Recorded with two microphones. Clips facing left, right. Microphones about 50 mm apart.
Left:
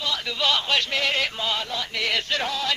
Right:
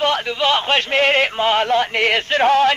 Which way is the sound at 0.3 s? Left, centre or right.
Right.